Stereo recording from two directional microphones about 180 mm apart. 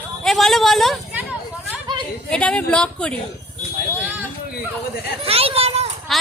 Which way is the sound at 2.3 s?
5° left (ahead or behind).